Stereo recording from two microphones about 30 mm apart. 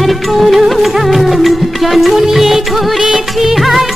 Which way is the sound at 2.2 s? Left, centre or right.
Centre.